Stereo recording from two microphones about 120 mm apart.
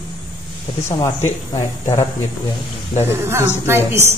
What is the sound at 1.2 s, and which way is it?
Speech, 25° left (ahead or behind).